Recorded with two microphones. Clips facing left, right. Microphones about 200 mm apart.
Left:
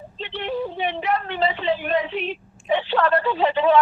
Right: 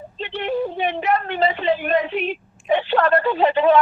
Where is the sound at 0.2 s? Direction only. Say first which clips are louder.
Right 3 dB; 50° right (ahead or behind).